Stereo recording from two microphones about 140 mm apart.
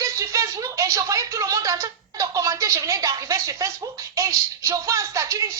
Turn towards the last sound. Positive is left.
turn(degrees=-20)  # may be behind; listen again after turning